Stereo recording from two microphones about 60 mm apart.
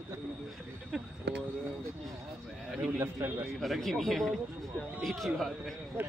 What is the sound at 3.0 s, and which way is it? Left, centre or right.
Speech, right.